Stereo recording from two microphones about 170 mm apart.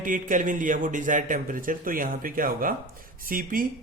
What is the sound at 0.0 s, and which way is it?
A man's voice, 50° right (ahead or behind).